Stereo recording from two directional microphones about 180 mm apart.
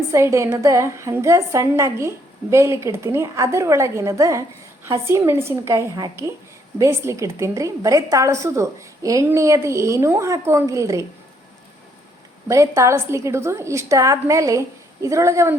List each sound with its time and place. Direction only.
0.1 s a woman's voice: 15° right (ahead or behind)
12.5 s a woman's voice: 15° right (ahead or behind)